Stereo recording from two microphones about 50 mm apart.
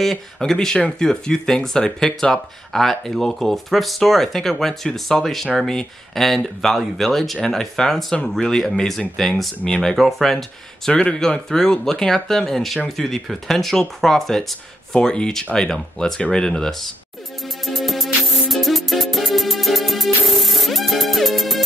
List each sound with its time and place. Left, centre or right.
0.0 s speech: centre
9.7 s speech: centre
9.9 s speech: centre
10.9 s speech: left
17.6 s music: centre